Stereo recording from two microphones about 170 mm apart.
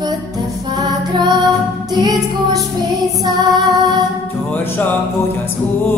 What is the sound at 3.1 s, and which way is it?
Female singing, 25° right (ahead or behind).